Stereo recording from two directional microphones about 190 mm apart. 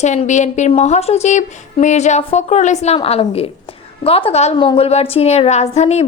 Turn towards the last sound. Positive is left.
turn(degrees=35)  # may be behind; listen again after turning